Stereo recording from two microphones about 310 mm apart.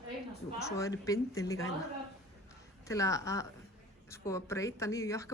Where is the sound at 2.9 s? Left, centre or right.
Centre.